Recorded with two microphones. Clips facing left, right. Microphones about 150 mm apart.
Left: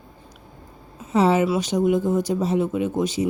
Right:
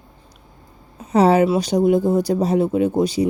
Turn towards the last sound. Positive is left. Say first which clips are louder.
# right 5 dB
turn(degrees=-35)  # may be behind; listen again after turning